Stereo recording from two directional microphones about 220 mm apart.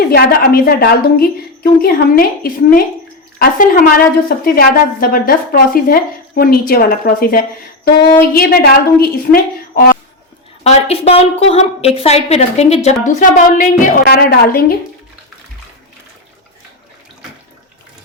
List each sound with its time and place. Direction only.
0.1 s a woman's voice: 45° left (ahead or behind)
10.6 s a woman's voice: 30° left (ahead or behind)